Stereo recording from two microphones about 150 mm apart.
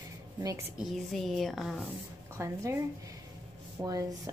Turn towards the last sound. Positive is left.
turn(degrees=-25)  # may be behind; listen again after turning